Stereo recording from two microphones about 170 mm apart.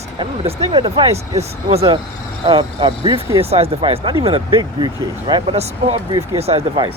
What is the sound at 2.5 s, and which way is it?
Speech, 30° right (ahead or behind).